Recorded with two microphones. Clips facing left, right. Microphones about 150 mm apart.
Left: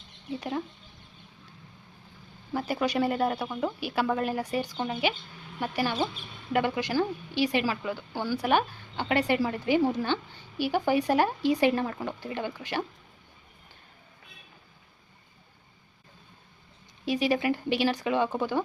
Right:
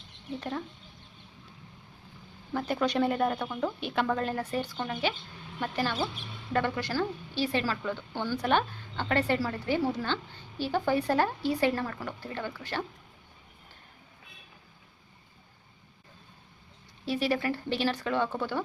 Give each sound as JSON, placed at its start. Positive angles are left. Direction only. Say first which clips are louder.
{"t": 0.3, "sound": "a woman's voice", "louder": "left 3 dB", "side_deg": 10}
{"t": 2.5, "sound": "a woman's voice", "louder": "even", "side_deg": 5}
{"t": 17.1, "sound": "a woman's voice", "louder": "left 3 dB", "side_deg": 15}